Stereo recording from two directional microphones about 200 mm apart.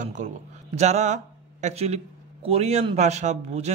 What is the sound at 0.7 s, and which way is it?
A man's voice, 35° right (ahead or behind).